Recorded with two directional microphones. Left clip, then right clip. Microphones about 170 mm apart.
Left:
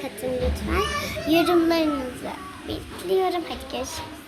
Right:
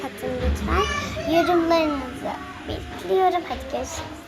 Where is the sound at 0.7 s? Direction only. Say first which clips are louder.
Right 5 dB; 25° left (ahead or behind).